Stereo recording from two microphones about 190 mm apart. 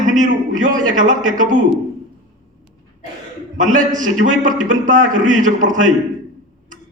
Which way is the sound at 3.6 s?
45° right (ahead or behind).